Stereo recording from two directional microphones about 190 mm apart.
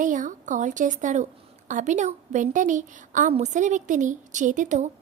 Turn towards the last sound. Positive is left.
turn(degrees=-40)  # may be behind; listen again after turning